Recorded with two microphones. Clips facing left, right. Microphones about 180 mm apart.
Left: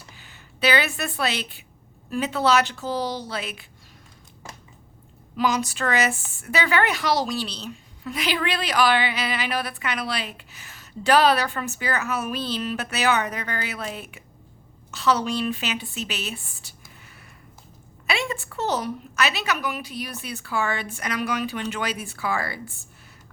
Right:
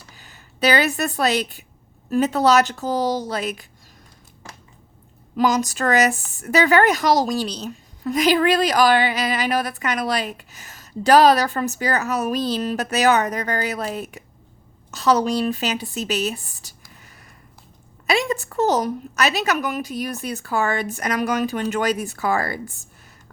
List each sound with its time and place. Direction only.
0.2 s a woman's voice: 40° right (ahead or behind)
5.4 s a woman's voice: 40° right (ahead or behind)
18.0 s a woman's voice: 40° right (ahead or behind)